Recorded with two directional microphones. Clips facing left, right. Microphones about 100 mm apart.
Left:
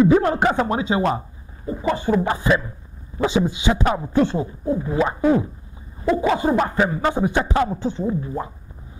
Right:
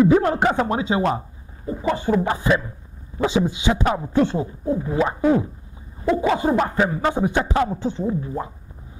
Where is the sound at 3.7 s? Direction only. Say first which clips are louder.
Even; 20° left (ahead or behind).